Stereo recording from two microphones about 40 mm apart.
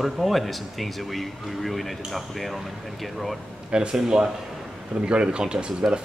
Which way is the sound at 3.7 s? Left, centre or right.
Right.